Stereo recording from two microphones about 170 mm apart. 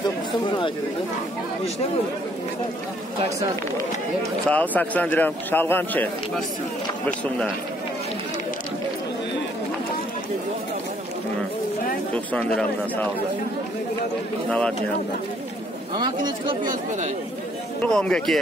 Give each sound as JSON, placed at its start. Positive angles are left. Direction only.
{"t": 4.5, "sound": "speech", "side_deg": 10}
{"t": 12.3, "sound": "speech", "side_deg": 5}
{"t": 16.0, "sound": "speech", "side_deg": -25}
{"t": 17.8, "sound": "a man's voice", "side_deg": 5}